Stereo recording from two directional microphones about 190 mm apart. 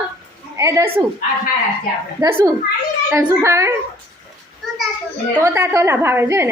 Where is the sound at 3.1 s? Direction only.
15° right (ahead or behind).